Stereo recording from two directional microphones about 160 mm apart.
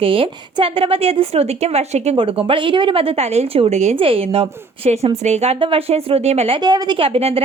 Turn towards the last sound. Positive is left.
turn(degrees=-40)  # may be behind; listen again after turning